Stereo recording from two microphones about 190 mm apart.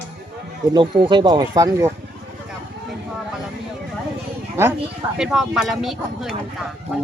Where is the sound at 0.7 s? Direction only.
25° right (ahead or behind).